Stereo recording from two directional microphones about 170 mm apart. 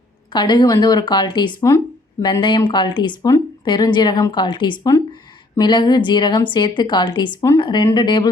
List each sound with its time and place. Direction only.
0.3 s a woman's voice: 25° left (ahead or behind)